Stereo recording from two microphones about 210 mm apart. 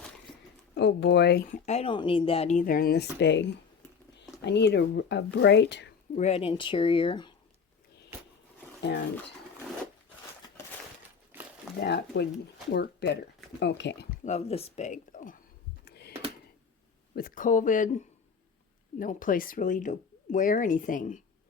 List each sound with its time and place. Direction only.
0.8 s speech: 55° left (ahead or behind)
1.6 s speech: 30° left (ahead or behind); by 3.4 s 55° left (ahead or behind)
4.4 s speech: 55° left (ahead or behind)
6.1 s speech: 30° left (ahead or behind)
11.8 s speech: 50° left (ahead or behind)
14.3 s speech: 30° left (ahead or behind)
15.8 s a sound: 50° left (ahead or behind)
17.2 s speech: 40° left (ahead or behind)